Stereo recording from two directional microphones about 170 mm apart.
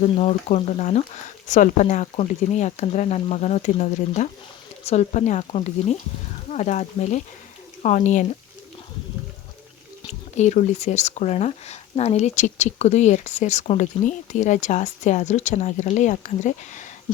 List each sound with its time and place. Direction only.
0.0 s speech: 40° left (ahead or behind)
10.1 s speech: 40° left (ahead or behind)